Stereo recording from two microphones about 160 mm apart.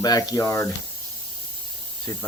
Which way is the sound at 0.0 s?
25° left (ahead or behind).